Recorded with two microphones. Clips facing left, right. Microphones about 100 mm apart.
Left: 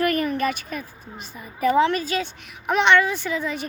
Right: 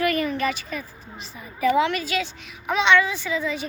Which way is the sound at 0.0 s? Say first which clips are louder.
Left 1 dB; 45° left (ahead or behind).